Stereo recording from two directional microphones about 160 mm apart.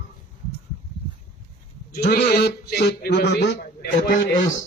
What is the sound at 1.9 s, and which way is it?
A man's voice, 75° left (ahead or behind).